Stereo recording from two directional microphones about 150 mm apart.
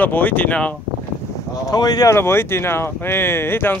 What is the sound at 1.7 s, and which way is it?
Speech, 25° left (ahead or behind).